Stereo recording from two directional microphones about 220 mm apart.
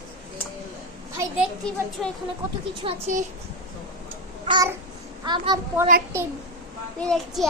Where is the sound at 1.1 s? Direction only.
10° right (ahead or behind).